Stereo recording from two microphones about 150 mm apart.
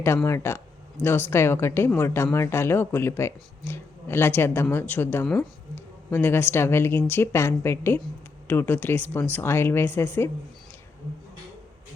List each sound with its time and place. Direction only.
0.0 s a woman's voice: 15° left (ahead or behind)